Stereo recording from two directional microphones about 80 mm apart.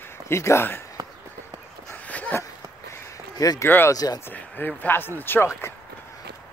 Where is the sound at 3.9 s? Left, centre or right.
Left.